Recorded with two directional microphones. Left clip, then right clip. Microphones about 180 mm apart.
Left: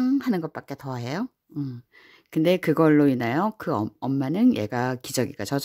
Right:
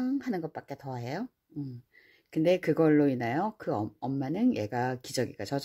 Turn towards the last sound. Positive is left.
turn(degrees=30)  # may be behind; listen again after turning